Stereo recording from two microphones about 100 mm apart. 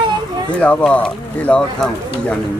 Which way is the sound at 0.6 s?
15° left (ahead or behind).